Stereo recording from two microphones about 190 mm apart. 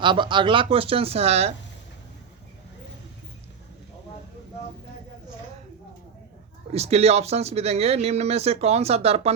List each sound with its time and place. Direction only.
0.0 s speech: 25° right (ahead or behind)
6.7 s speech: 35° right (ahead or behind)